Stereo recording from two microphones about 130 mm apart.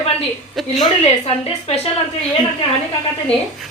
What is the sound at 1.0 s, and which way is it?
Speech, 50° left (ahead or behind).